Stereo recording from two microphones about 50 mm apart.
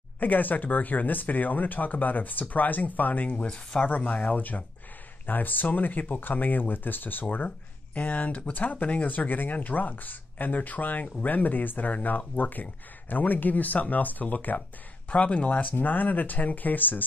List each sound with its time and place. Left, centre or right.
0.2 s speech: left
3.4 s speech: centre
3.8 s speech: left